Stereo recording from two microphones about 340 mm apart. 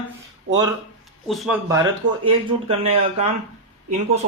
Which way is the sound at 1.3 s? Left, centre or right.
Centre.